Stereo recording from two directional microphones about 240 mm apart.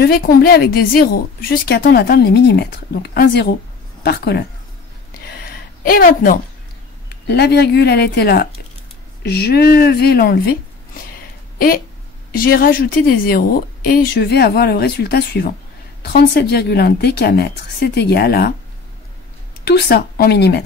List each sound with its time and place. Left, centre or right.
0.0 s a woman's voice: left
5.4 s a sound: left
7.1 s a woman's voice: left
12.4 s a woman's voice: left
19.6 s speech: left